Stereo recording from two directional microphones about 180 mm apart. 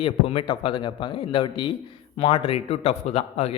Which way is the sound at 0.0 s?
30° left (ahead or behind).